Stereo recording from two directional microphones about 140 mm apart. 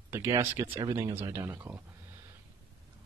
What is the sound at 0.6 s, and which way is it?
Speech, 25° right (ahead or behind).